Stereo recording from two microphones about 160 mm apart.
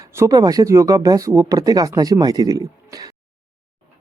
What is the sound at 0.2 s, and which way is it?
Speech, 25° right (ahead or behind).